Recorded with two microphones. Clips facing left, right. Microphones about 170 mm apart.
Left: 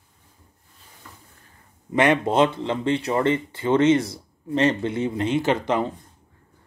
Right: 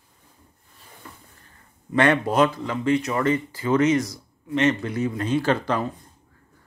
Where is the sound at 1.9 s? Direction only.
20° left (ahead or behind).